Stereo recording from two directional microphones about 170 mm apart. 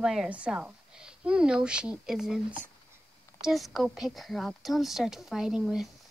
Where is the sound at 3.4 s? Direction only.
Centre (ahead or behind).